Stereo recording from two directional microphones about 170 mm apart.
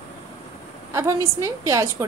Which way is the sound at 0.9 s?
15° right (ahead or behind).